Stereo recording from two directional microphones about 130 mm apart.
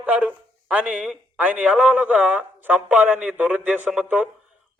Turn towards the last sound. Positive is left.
turn(degrees=-10)  # may be behind; listen again after turning